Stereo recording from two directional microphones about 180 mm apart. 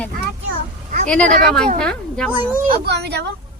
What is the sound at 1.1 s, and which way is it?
Speech, 5° left (ahead or behind).